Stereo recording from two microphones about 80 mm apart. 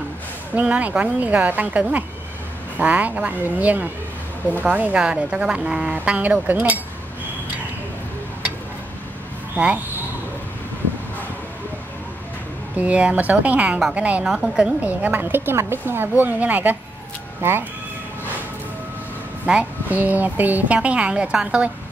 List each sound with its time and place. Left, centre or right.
0.6 s speech: centre
9.6 s speech: right
12.7 s speech: centre
14.2 s a woman's voice: centre
14.8 s speech: right
19.4 s speech: centre